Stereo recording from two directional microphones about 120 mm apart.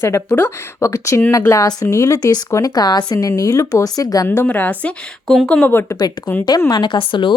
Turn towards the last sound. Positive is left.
turn(degrees=40)  # may be behind; listen again after turning